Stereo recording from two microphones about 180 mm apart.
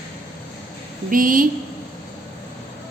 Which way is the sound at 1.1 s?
50° right (ahead or behind).